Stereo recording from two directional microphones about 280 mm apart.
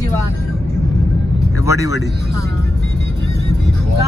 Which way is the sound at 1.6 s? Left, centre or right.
Centre.